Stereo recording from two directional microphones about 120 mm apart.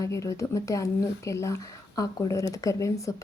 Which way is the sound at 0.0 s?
25° left (ahead or behind).